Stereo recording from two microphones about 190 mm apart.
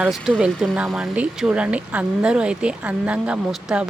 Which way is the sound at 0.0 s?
Centre (ahead or behind).